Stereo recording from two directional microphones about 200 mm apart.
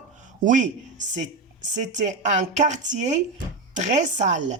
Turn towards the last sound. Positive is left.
turn(degrees=-35)  # may be behind; listen again after turning